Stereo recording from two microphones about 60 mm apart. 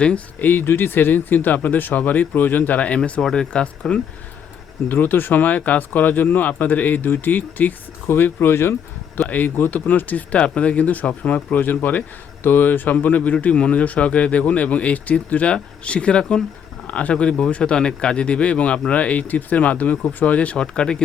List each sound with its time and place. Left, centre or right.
0.3 s speech: left
3.0 s speech: centre
4.9 s speech: left; by 21.0 s centre